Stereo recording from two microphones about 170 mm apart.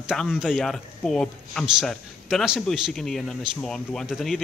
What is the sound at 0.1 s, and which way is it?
Speech, centre (ahead or behind).